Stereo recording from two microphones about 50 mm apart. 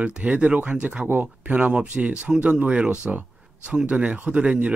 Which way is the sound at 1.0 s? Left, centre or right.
Right.